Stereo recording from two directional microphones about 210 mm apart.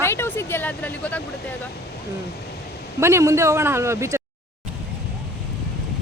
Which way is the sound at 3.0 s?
15° right (ahead or behind).